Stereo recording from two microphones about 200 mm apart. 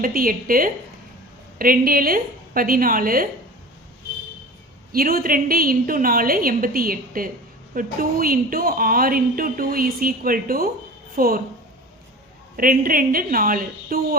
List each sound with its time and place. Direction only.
0.0 s speech: 45° right (ahead or behind)
4.9 s speech: 45° right (ahead or behind)
12.5 s speech: 45° right (ahead or behind)